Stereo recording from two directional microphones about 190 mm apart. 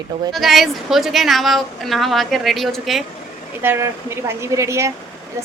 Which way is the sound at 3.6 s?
10° right (ahead or behind).